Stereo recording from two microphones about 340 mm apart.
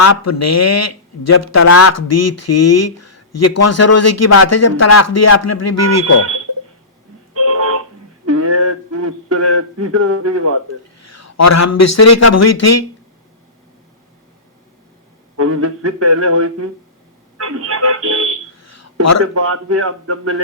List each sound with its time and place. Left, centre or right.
0.0 s speech: left
7.3 s telephone: right
8.3 s a sound: right
11.0 s a man's voice: left
15.4 s a man's voice: right
18.6 s a sound: left
19.3 s a man's voice: right